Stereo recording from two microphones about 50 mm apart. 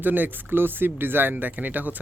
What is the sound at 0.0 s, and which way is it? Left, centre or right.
Speech, right.